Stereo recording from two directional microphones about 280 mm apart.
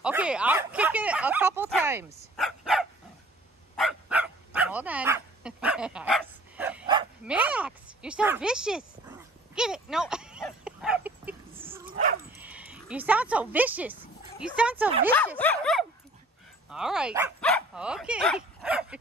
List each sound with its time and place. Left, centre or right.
0.0 s speech: centre
3.7 s dog: centre
7.2 s speech: centre
11.6 s dog: centre
12.3 s speech: centre
15.1 s speech: centre